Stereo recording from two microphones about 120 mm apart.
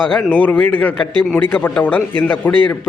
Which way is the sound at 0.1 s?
10° left (ahead or behind).